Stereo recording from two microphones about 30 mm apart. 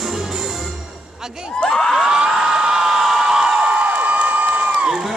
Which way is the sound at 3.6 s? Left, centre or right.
Right.